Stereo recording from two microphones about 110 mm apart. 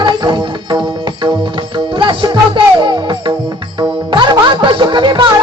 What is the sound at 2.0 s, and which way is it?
Music, 45° right (ahead or behind).